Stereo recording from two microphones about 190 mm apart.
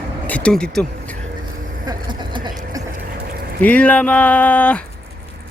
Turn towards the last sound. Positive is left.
turn(degrees=5)  # may be behind; listen again after turning